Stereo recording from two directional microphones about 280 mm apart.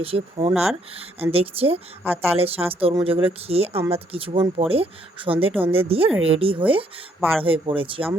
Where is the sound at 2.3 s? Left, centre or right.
Right.